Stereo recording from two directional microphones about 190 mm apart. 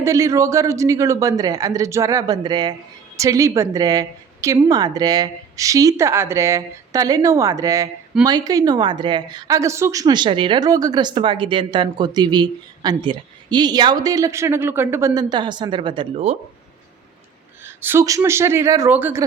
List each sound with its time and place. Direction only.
0.0 s a woman's voice: 15° right (ahead or behind); by 16.4 s 35° right (ahead or behind)
17.7 s a woman's voice: 10° right (ahead or behind)